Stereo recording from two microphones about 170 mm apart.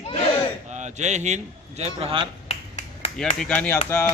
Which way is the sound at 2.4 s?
40° left (ahead or behind).